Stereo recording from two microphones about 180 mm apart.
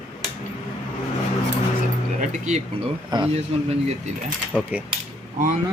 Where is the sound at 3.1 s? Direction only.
25° right (ahead or behind).